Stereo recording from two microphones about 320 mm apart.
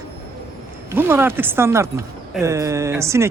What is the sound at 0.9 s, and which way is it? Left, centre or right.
Speech, centre.